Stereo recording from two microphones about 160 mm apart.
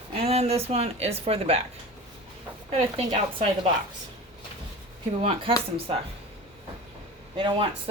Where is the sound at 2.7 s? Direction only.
40° right (ahead or behind).